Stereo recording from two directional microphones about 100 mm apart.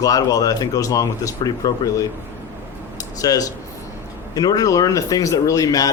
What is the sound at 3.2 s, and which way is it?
Speech, 35° left (ahead or behind).